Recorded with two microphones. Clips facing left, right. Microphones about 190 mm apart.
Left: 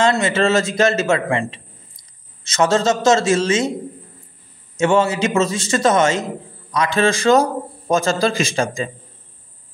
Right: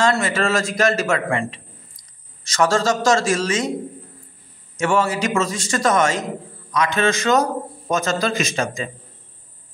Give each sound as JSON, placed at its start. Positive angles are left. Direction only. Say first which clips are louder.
{"t": 0.0, "sound": "a man's voice", "louder": "left 3 dB", "side_deg": 25}
{"t": 4.7, "sound": "a man's voice", "louder": "left 3 dB", "side_deg": 25}